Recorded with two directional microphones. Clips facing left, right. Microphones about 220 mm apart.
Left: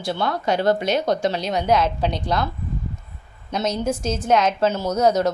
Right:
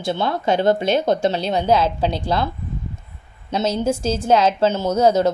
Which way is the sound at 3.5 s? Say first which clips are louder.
Right 3 dB; 30° right (ahead or behind).